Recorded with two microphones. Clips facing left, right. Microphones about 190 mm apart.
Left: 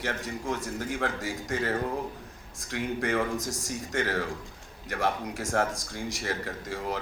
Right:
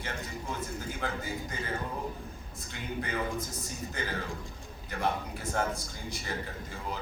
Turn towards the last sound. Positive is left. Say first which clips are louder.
# left 6 dB
turn(degrees=75)  # may be behind; listen again after turning